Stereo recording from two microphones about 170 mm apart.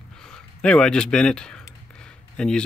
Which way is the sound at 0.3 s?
5° left (ahead or behind).